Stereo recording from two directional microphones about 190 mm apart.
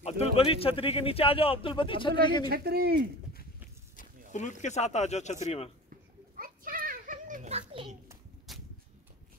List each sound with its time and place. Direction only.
0.0 s a man's voice: 30° left (ahead or behind)
2.5 s speech: 55° right (ahead or behind)
4.3 s speech: 40° left (ahead or behind)
5.9 s children playing: 50° right (ahead or behind); by 8.0 s 30° right (ahead or behind)
8.5 s a sound: centre (ahead or behind)